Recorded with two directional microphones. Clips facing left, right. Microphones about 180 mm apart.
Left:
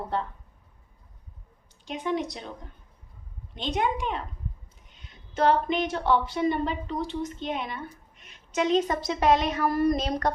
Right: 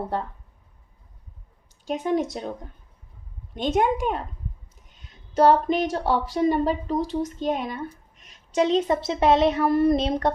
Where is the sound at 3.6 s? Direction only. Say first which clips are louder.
Right 6 dB; 45° right (ahead or behind).